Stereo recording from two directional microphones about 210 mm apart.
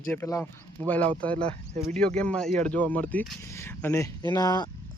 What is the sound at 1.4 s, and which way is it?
Speech, 35° right (ahead or behind).